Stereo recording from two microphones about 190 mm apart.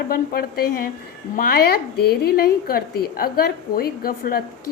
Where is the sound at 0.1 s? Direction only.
50° left (ahead or behind).